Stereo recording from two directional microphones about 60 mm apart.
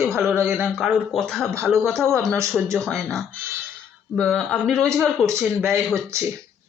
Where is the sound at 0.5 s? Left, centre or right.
Centre.